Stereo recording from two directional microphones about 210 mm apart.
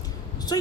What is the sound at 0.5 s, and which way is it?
Speech, 20° left (ahead or behind).